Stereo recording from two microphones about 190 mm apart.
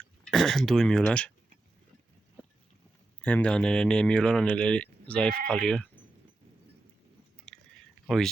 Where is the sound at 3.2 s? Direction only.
10° left (ahead or behind).